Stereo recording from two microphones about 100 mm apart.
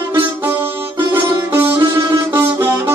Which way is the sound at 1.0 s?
20° right (ahead or behind).